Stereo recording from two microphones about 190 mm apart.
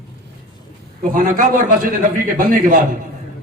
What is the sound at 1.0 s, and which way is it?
A man's voice, 45° right (ahead or behind).